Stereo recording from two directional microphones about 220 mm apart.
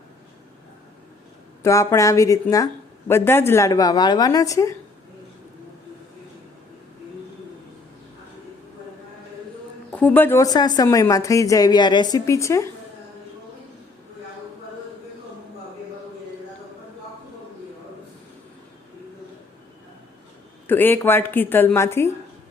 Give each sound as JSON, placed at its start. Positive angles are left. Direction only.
{"t": 1.6, "sound": "a woman's voice", "side_deg": 15}
{"t": 9.9, "sound": "a woman's voice", "side_deg": 5}
{"t": 20.7, "sound": "a woman's voice", "side_deg": 10}